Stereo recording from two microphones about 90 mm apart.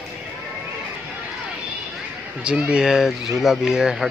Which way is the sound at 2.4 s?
10° right (ahead or behind).